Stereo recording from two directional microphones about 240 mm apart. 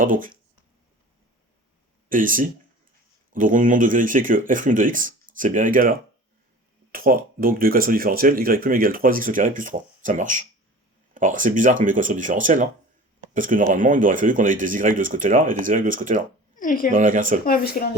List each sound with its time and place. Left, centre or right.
0.0 s speech: right
2.0 s speech: right
16.6 s speech: left
16.9 s speech: right
17.4 s speech: left